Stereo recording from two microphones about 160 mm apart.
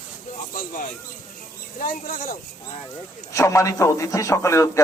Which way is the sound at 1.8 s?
60° left (ahead or behind).